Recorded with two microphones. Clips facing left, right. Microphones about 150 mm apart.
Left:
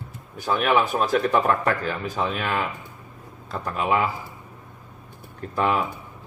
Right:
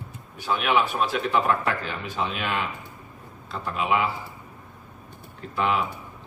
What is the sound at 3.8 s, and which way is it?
Speech, 45° left (ahead or behind).